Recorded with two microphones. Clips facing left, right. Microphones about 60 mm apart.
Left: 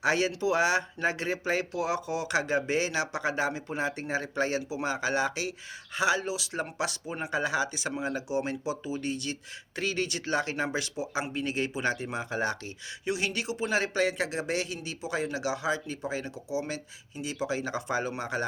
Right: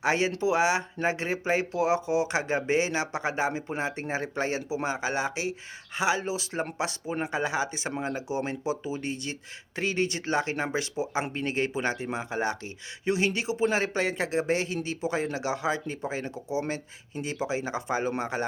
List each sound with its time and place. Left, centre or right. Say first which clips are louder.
0.0 s speech: right 1 dB; right
17.4 s speech: even; right